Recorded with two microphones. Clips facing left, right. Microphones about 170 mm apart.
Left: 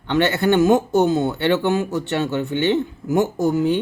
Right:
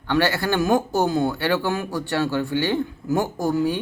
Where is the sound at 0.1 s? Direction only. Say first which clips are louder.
Left 4 dB; 20° left (ahead or behind).